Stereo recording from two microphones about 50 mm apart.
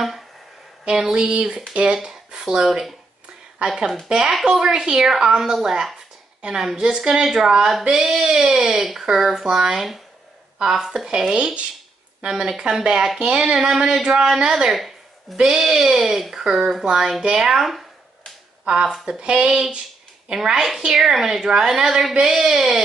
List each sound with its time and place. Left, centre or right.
0.8 s speech: centre
4.6 s speech: centre
11.3 s speech: right
12.2 s speech: centre
14.7 s a sound: centre
15.3 s speech: centre
18.7 s speech: centre